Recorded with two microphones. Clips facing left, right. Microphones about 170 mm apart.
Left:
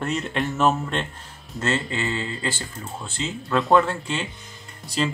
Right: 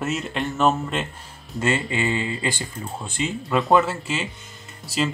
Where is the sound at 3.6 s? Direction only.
Centre (ahead or behind).